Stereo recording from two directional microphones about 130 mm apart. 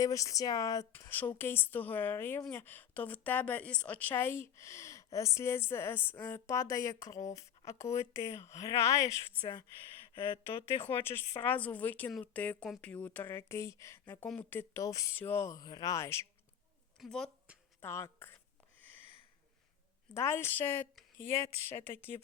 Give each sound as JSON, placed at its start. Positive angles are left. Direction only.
{"t": 0.0, "sound": "a woman's voice", "side_deg": 25}
{"t": 10.8, "sound": "a woman's voice", "side_deg": 15}
{"t": 12.9, "sound": "a woman's voice", "side_deg": 10}
{"t": 17.0, "sound": "speech", "side_deg": 0}
{"t": 17.7, "sound": "speech", "side_deg": 20}
{"t": 20.1, "sound": "a woman's voice", "side_deg": 20}